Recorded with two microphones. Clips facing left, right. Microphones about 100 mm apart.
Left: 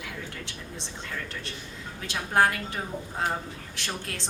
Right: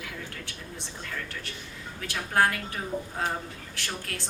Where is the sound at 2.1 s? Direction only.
25° left (ahead or behind).